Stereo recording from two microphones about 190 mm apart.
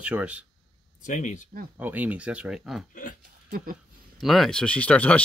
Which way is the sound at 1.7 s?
10° right (ahead or behind).